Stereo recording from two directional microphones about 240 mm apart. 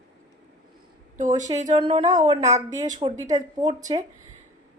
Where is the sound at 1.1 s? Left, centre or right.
Right; by 3.7 s centre.